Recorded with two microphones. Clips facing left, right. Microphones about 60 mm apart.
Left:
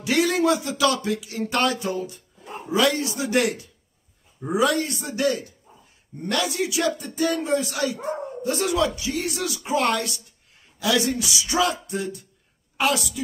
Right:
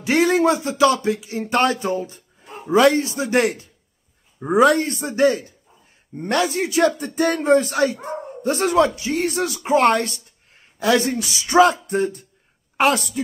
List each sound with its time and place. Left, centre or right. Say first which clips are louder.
0.0 s a man's voice: right 4 dB; right